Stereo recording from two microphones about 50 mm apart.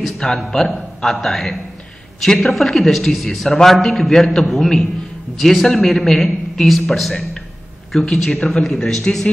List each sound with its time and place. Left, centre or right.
0.0 s a sound: centre
0.5 s a man's voice: centre
8.0 s a man's voice: centre